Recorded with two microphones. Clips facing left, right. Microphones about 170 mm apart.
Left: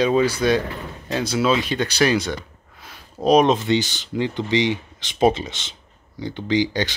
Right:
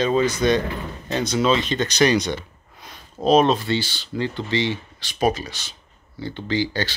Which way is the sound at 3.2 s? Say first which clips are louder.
Left 1 dB; 15° left (ahead or behind).